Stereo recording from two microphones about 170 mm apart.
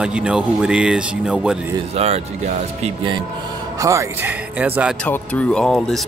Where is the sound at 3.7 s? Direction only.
20° right (ahead or behind).